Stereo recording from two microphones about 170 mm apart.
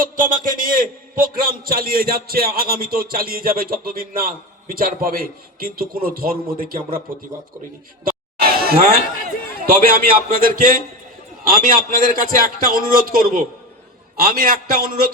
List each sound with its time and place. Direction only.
0.0 s a man's voice: 50° right (ahead or behind)
8.0 s chatter: 60° right (ahead or behind)
9.6 s a man's voice: 60° right (ahead or behind)